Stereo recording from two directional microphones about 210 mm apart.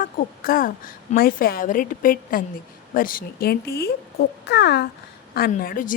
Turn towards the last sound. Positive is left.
turn(degrees=40)  # may be behind; listen again after turning